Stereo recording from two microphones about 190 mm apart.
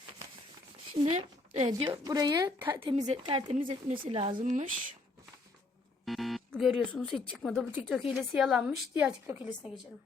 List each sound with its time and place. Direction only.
1.0 s speech: 35° right (ahead or behind)
1.6 s speech: 25° right (ahead or behind)
4.4 s speech: 40° right (ahead or behind)
6.1 s music: centre (ahead or behind)
7.3 s a woman's voice: centre (ahead or behind)